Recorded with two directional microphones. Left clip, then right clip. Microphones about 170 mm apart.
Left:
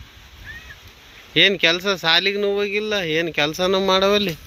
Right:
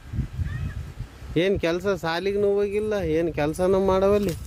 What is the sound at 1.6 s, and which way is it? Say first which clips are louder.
Speech: left 6 dB; 10° right (ahead or behind).